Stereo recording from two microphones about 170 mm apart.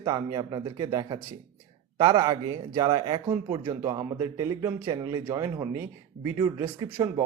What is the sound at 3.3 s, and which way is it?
Speech, 10° right (ahead or behind).